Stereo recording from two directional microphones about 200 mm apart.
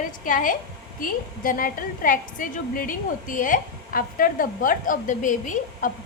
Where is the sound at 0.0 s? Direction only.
40° left (ahead or behind).